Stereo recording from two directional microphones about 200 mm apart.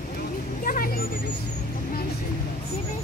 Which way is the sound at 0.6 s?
45° left (ahead or behind).